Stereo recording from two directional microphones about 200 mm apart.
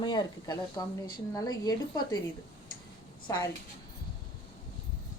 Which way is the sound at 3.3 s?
15° left (ahead or behind).